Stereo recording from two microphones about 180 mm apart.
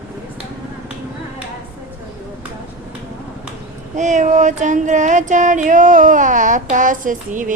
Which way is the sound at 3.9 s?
40° right (ahead or behind).